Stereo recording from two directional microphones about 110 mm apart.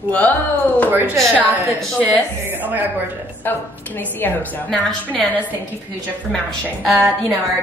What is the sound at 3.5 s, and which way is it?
A woman's voice, 20° left (ahead or behind).